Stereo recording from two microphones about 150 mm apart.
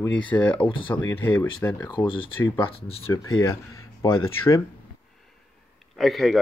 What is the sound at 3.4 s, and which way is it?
Speech, 20° left (ahead or behind).